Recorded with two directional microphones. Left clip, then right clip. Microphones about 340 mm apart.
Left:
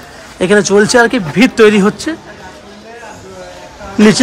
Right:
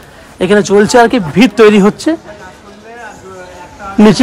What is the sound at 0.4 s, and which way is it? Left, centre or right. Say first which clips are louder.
Speech: right 1 dB; centre.